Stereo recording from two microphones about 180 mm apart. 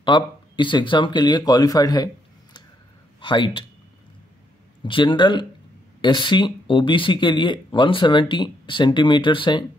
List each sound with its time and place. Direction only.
0.0 s speech: 25° left (ahead or behind)
3.2 s speech: 25° left (ahead or behind)
4.8 s speech: 25° left (ahead or behind)